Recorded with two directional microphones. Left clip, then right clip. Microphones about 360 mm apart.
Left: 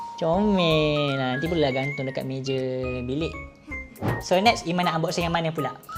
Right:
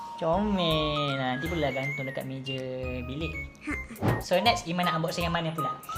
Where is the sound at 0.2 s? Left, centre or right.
Centre; by 5.5 s left.